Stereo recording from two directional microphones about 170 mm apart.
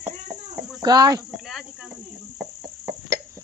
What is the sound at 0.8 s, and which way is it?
Speech, 25° right (ahead or behind).